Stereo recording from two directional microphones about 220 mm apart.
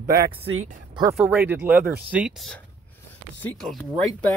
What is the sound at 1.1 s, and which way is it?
Speech, 5° right (ahead or behind).